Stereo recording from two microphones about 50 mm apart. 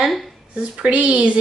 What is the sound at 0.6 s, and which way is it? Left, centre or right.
Speech, right.